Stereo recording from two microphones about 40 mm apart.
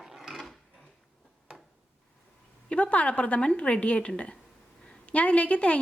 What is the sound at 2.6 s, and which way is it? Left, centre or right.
A woman's voice, left.